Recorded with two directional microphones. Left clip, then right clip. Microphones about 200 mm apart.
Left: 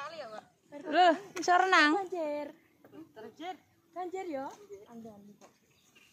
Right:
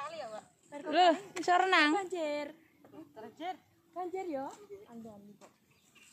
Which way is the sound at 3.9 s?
20° left (ahead or behind).